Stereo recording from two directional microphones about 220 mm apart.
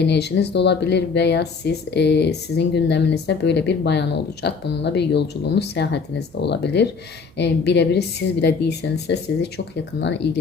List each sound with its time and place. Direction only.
0.0 s speech: 50° left (ahead or behind)